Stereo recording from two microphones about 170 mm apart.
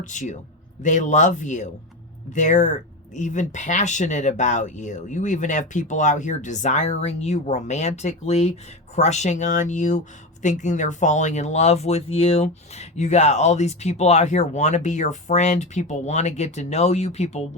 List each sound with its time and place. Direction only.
0.0 s speech: 45° left (ahead or behind)